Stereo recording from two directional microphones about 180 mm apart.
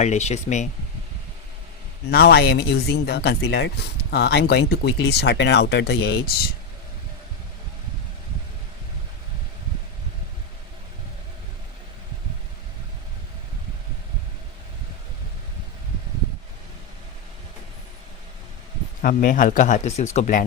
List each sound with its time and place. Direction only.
0.0 s speech: 40° left (ahead or behind)
2.0 s speech: 60° left (ahead or behind)
19.0 s speech: 50° left (ahead or behind)